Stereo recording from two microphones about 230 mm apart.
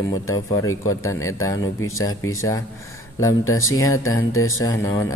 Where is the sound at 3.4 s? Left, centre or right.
Left.